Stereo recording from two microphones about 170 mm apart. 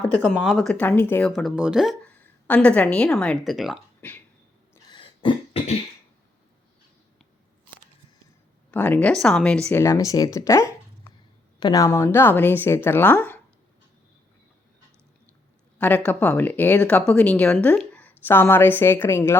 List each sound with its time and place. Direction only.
0.2 s a woman's voice: centre (ahead or behind)
1.4 s speech: 5° right (ahead or behind)
2.0 s a woman's voice: 10° left (ahead or behind)
4.7 s cough: 25° left (ahead or behind)
8.7 s a woman's voice: 10° left (ahead or behind)
9.8 s a woman's voice: 20° left (ahead or behind)
16.0 s a woman's voice: 5° left (ahead or behind)